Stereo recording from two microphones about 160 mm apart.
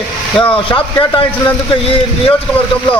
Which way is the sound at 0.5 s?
35° left (ahead or behind).